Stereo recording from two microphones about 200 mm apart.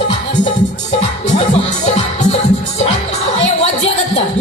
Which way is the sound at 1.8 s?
35° left (ahead or behind).